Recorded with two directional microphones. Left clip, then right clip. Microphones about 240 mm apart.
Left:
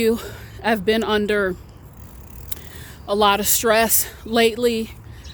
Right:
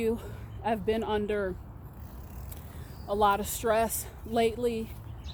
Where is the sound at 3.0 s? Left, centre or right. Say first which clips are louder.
Left 8 dB; left.